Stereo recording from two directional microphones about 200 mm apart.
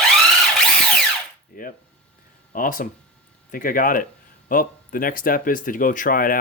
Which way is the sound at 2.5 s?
45° left (ahead or behind).